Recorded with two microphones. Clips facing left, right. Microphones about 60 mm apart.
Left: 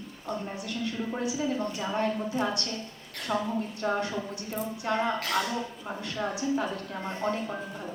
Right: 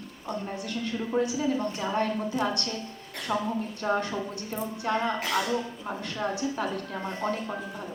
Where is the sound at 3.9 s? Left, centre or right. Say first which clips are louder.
Right 2 dB; centre.